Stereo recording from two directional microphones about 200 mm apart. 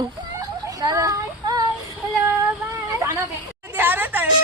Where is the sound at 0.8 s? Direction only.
15° right (ahead or behind).